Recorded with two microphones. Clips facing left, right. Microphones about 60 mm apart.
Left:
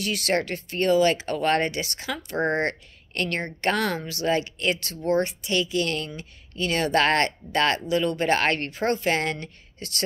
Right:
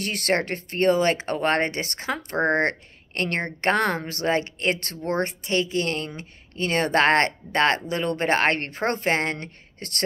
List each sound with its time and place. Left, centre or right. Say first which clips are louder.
0.0 s a woman's voice: right 1 dB; right